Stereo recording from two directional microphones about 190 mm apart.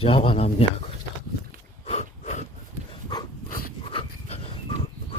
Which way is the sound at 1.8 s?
35° left (ahead or behind).